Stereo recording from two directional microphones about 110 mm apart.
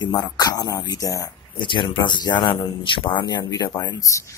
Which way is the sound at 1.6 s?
45° left (ahead or behind).